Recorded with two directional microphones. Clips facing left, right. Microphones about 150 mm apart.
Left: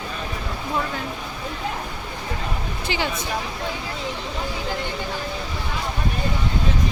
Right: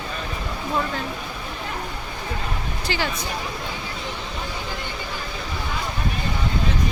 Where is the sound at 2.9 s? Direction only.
20° left (ahead or behind).